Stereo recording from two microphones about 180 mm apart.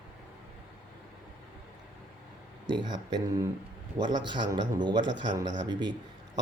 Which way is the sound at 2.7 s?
25° right (ahead or behind).